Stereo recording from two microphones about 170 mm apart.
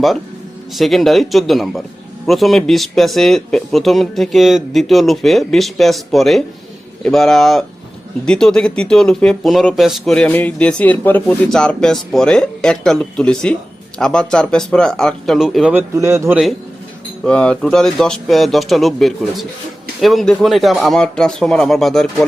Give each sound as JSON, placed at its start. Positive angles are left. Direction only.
{"t": 0.8, "sound": "speech", "side_deg": 0}
{"t": 16.0, "sound": "a man's voice", "side_deg": -15}
{"t": 17.2, "sound": "speech", "side_deg": 5}